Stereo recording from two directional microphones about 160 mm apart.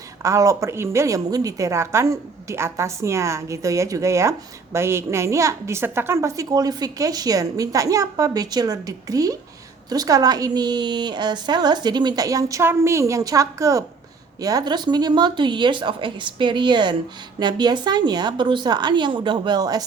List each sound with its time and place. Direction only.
0.2 s a woman's voice: 20° right (ahead or behind)